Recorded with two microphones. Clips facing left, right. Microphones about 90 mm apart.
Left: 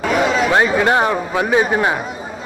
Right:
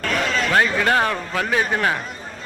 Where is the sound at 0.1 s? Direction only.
10° left (ahead or behind).